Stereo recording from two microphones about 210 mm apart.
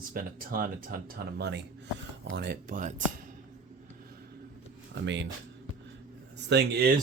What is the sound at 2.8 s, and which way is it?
Speech, 40° right (ahead or behind).